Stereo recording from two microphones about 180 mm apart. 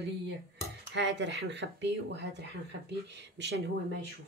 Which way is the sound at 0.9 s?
80° right.